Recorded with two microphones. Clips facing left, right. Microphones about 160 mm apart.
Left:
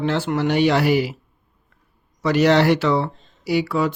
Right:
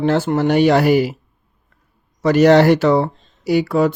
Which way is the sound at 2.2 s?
45° right (ahead or behind).